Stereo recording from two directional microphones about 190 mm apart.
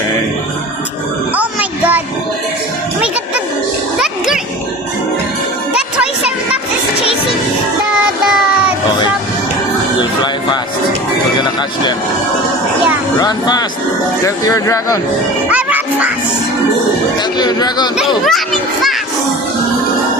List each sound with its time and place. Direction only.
1.4 s music: 10° right (ahead or behind)
5.7 s a sound: 5° right (ahead or behind)
13.1 s speech: 20° left (ahead or behind)
15.4 s music: 5° right (ahead or behind)
17.3 s speech: 20° left (ahead or behind)
18.3 s a child's voice: centre (ahead or behind)